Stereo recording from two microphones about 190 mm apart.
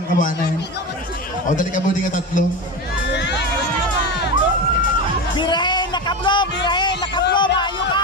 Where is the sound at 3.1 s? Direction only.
65° left (ahead or behind).